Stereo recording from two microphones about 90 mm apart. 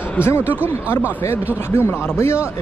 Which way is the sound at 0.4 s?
20° right (ahead or behind).